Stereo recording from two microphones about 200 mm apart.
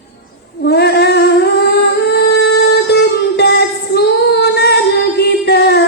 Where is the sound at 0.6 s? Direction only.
55° left (ahead or behind).